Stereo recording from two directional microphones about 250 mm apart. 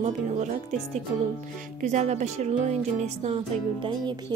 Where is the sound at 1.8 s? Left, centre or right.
Right.